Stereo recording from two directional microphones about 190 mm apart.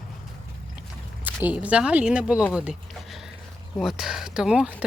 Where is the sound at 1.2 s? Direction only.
10° right (ahead or behind).